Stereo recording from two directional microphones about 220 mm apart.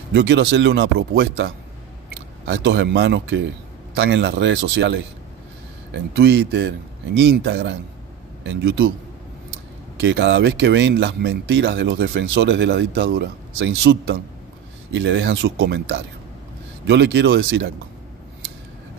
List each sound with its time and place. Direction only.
0.1 s speech: 50° right (ahead or behind)
10.0 s speech: 55° right (ahead or behind)